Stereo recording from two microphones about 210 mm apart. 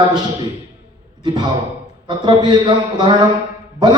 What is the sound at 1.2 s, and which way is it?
A man's voice, 20° right (ahead or behind).